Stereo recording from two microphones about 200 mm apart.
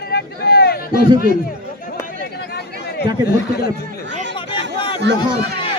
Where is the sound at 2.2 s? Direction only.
55° left (ahead or behind).